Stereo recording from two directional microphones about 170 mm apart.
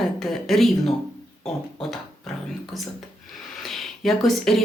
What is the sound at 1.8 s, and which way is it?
Music, centre (ahead or behind).